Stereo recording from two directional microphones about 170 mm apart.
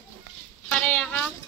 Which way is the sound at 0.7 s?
10° left (ahead or behind).